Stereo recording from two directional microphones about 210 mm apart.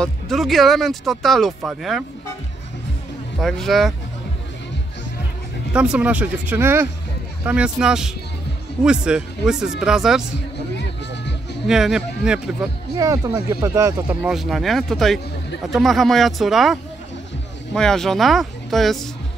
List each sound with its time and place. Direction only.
0.0 s speech: centre (ahead or behind)
3.3 s speech: centre (ahead or behind)
5.7 s speech: 5° right (ahead or behind)
11.6 s speech: centre (ahead or behind)
12.9 s speech: 15° right (ahead or behind)
14.2 s speech: centre (ahead or behind)